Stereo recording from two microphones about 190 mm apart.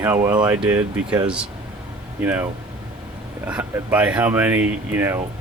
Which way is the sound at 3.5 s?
10° right (ahead or behind).